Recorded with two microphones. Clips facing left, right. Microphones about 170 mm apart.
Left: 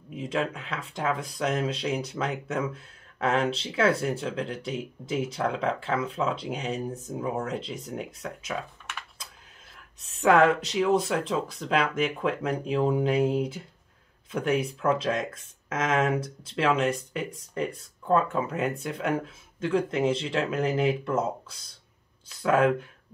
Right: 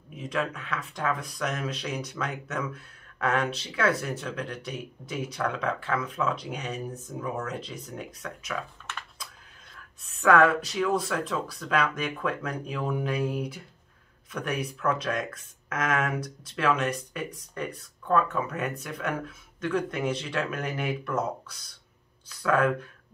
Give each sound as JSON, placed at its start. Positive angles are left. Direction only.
{"t": 0.1, "sound": "speech", "side_deg": 25}
{"t": 10.0, "sound": "speech", "side_deg": 25}